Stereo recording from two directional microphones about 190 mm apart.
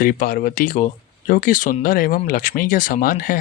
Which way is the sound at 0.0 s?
50° left (ahead or behind).